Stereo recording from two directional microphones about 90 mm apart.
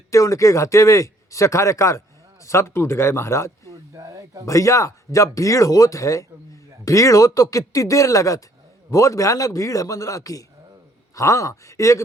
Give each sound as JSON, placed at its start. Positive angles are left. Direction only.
{"t": 0.1, "sound": "speech", "side_deg": 35}
{"t": 3.7, "sound": "a sound", "side_deg": -40}
{"t": 4.4, "sound": "speech", "side_deg": 35}